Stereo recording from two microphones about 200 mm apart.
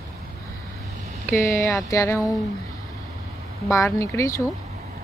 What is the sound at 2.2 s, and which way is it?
Speech, centre (ahead or behind).